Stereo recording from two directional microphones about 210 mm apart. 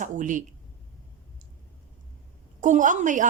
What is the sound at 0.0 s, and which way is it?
Speech, 40° right (ahead or behind).